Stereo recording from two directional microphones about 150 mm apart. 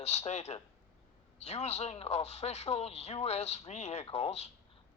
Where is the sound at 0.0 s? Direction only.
45° left (ahead or behind).